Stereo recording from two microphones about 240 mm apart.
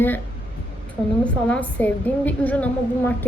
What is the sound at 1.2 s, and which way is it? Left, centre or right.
A woman's voice, centre.